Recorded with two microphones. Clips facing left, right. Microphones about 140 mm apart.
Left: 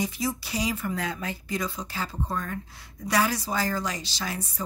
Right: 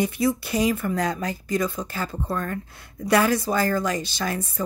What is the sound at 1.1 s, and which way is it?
A woman's voice, 40° right (ahead or behind).